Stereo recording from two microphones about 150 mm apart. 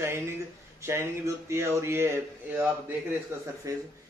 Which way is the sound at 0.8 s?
20° right (ahead or behind).